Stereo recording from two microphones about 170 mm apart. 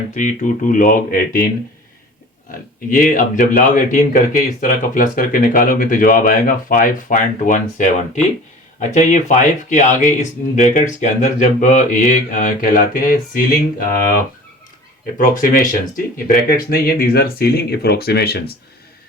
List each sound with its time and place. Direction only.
0.1 s speech: 45° left (ahead or behind)
2.5 s speech: 50° left (ahead or behind)
15.2 s speech: 50° left (ahead or behind); by 18.5 s 70° left (ahead or behind)